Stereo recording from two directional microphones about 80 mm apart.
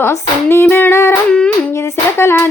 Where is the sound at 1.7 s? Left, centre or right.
Left.